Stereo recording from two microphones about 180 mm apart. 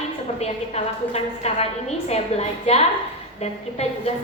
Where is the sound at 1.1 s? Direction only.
35° left (ahead or behind).